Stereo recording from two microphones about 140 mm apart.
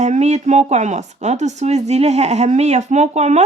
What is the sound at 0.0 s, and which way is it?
Speech, 55° right (ahead or behind).